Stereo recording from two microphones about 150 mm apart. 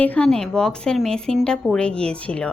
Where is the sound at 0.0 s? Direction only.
10° left (ahead or behind).